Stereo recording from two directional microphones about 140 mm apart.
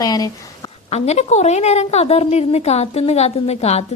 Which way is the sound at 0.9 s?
55° left (ahead or behind).